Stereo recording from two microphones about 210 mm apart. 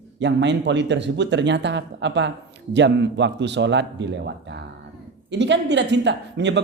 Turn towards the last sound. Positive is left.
turn(degrees=-55)  # may be behind; listen again after turning